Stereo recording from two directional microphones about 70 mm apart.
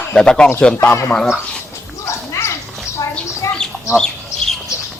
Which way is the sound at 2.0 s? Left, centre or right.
Left.